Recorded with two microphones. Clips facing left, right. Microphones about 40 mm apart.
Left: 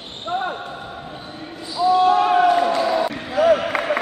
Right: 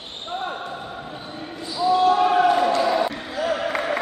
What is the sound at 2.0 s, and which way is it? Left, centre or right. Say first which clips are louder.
Basketball bounce: left 1 dB; left.